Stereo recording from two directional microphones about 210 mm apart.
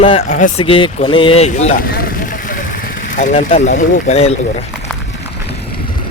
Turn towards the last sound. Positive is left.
turn(degrees=30)  # may be behind; listen again after turning